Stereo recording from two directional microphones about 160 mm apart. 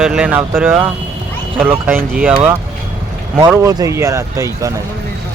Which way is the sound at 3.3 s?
15° right (ahead or behind).